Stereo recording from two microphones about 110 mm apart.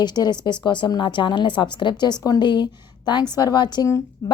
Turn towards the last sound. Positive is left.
turn(degrees=35)  # may be behind; listen again after turning